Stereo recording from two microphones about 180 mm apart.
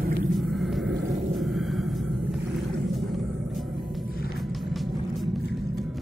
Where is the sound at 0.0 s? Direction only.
55° right (ahead or behind).